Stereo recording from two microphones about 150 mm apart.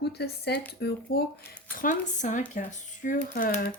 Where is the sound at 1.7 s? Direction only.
60° left (ahead or behind).